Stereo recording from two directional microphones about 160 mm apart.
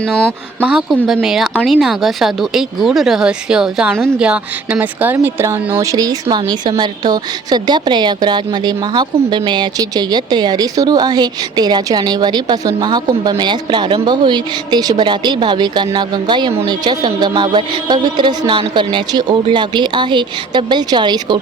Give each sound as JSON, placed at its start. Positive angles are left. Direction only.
{"t": 0.0, "sound": "a woman's voice", "side_deg": 5}
{"t": 0.6, "sound": "a woman's voice", "side_deg": -5}